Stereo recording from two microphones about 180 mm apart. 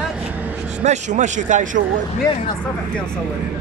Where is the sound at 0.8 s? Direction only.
40° right (ahead or behind).